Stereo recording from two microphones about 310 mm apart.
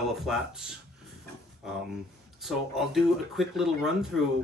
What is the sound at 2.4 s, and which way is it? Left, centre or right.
Speech, centre.